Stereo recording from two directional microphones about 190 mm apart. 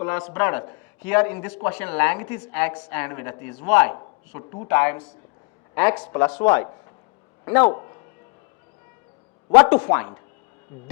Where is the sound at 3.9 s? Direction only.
30° left (ahead or behind).